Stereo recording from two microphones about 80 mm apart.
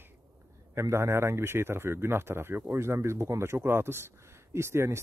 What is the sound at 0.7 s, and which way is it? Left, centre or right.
Speech, right.